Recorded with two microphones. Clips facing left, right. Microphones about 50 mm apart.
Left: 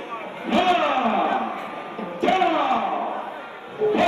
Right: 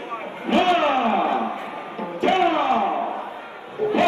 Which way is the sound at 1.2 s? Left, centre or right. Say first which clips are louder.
Right 1 dB; left.